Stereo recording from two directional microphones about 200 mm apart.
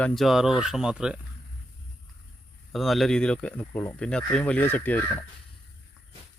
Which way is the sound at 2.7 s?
Centre (ahead or behind).